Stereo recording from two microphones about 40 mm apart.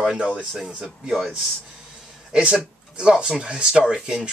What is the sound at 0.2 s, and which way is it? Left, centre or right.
Speech, right.